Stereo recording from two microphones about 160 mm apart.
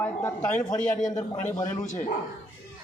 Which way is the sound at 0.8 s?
55° left (ahead or behind).